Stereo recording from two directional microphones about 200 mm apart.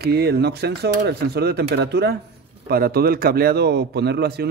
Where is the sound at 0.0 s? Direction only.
55° right (ahead or behind).